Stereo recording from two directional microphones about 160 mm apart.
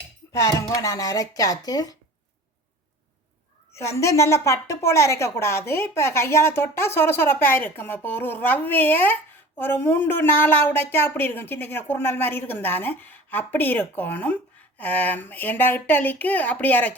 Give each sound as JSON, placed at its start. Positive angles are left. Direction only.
{"t": 0.3, "sound": "speech", "side_deg": 20}
{"t": 3.8, "sound": "a woman's voice", "side_deg": 20}